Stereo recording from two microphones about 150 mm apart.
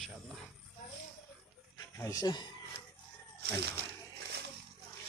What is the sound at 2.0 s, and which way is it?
Speech, 25° left (ahead or behind).